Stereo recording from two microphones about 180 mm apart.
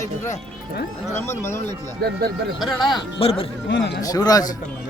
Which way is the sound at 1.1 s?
15° left (ahead or behind).